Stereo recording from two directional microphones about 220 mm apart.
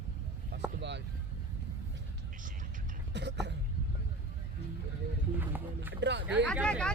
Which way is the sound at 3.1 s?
50° right (ahead or behind).